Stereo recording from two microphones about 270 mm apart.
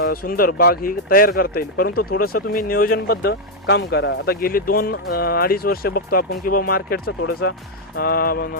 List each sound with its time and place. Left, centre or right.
0.0 s speech: left